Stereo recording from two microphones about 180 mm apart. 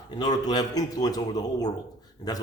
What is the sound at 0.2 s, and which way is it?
A man's voice, 20° left (ahead or behind).